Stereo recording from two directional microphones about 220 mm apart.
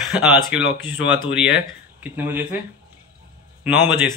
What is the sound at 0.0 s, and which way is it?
A man's voice, 5° right (ahead or behind).